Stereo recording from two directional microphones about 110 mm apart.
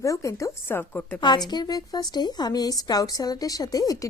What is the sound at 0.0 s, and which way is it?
A woman's voice, 30° left (ahead or behind).